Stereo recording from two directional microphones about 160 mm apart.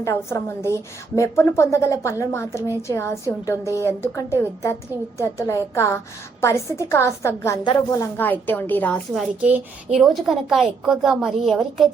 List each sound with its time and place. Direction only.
0.0 s a woman's voice: 20° left (ahead or behind)
8.1 s a woman's voice: 10° left (ahead or behind)
9.4 s a woman's voice: 5° right (ahead or behind)